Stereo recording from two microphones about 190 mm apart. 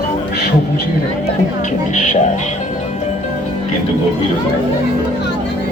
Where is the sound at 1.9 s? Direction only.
40° left (ahead or behind).